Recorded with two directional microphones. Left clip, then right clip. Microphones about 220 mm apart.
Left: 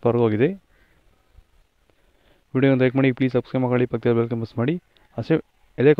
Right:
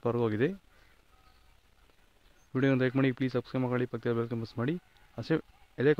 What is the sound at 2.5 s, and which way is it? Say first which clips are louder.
Speech: left 9 dB; 25° left (ahead or behind).